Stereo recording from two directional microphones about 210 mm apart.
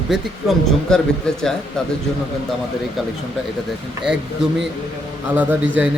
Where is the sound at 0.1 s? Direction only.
Centre (ahead or behind).